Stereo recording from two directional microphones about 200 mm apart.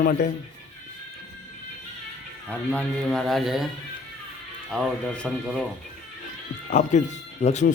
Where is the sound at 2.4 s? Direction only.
5° left (ahead or behind).